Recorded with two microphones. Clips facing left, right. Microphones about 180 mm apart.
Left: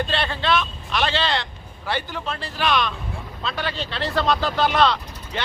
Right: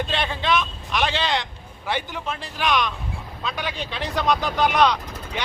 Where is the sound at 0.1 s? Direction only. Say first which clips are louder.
Left 1 dB; 15° right (ahead or behind).